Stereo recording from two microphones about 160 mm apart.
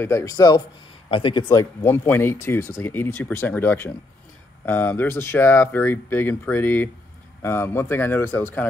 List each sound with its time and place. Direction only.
0.0 s speech: 20° left (ahead or behind)
1.8 s speech: 15° left (ahead or behind)